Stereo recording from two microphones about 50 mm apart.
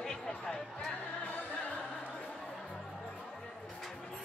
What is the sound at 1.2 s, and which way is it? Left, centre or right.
Music, left.